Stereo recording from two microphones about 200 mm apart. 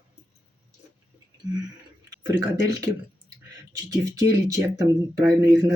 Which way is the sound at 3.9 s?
15° right (ahead or behind).